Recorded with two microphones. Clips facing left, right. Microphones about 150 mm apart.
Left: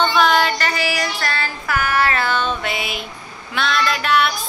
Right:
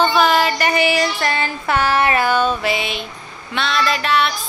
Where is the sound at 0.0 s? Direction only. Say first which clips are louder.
Right 1 dB; 5° right (ahead or behind).